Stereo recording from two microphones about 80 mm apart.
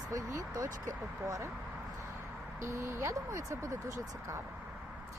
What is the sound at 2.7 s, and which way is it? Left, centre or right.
Speech, right.